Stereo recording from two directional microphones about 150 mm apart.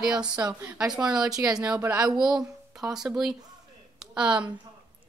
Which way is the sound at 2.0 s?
25° right (ahead or behind).